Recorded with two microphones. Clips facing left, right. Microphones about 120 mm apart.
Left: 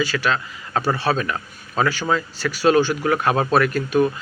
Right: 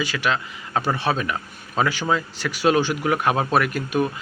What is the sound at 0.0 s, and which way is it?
Speech, 15° right (ahead or behind).